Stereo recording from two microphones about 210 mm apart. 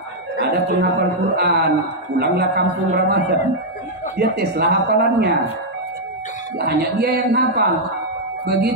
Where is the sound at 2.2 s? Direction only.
50° right (ahead or behind).